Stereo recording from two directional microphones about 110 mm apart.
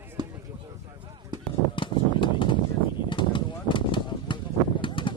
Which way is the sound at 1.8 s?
50° left (ahead or behind).